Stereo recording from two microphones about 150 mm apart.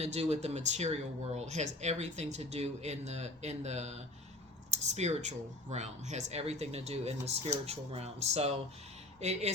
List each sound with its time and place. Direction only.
0.0 s speech: 45° right (ahead or behind)